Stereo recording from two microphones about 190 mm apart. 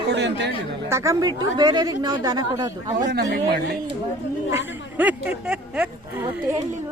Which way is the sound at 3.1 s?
55° right (ahead or behind).